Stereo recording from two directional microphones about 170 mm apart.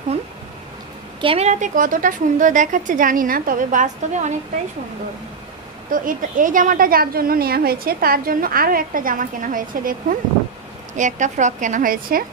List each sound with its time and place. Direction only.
1.2 s a woman's voice: 35° right (ahead or behind)
5.9 s a woman's voice: 55° right (ahead or behind)